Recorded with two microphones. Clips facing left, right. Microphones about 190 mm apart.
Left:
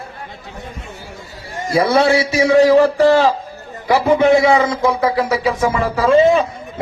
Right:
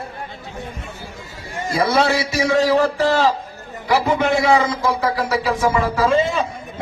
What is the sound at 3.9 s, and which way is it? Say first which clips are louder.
A man's voice: left 6 dB; 60° left (ahead or behind).